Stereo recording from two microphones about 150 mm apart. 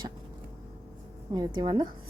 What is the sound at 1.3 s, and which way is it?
Speech, 25° right (ahead or behind).